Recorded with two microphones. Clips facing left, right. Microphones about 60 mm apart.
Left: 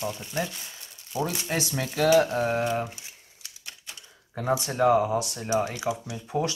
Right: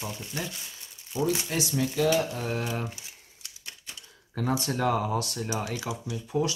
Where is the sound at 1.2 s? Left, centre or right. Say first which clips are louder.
Right 4 dB; left.